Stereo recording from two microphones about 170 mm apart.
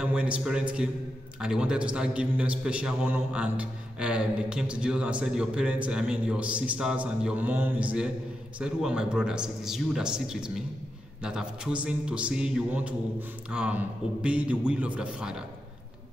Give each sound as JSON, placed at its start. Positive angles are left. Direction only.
{"t": 0.0, "sound": "a man's voice", "side_deg": -5}